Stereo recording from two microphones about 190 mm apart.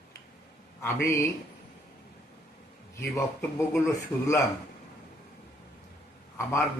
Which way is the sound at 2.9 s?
15° left (ahead or behind).